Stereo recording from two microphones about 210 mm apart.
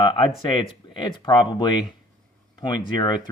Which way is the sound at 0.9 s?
20° left (ahead or behind).